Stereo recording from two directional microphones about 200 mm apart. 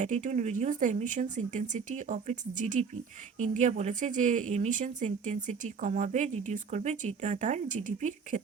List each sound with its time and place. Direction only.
0.0 s speech: 35° right (ahead or behind)